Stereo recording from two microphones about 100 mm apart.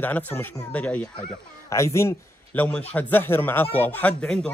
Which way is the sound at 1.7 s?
30° left (ahead or behind).